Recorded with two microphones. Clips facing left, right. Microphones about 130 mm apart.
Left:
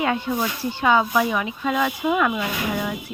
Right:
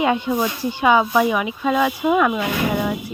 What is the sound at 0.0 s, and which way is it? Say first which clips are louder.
Speech: right 4 dB; 20° right (ahead or behind).